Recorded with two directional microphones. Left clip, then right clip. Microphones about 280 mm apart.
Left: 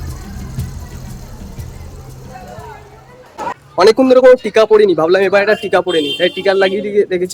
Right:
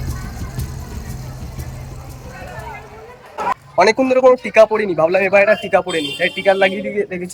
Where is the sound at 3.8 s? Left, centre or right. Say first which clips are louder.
Left 5 dB; centre.